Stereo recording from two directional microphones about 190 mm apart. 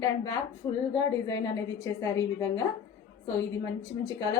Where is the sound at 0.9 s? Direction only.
20° left (ahead or behind).